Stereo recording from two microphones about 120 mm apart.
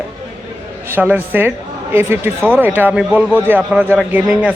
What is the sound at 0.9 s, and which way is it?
A man's voice, 15° right (ahead or behind).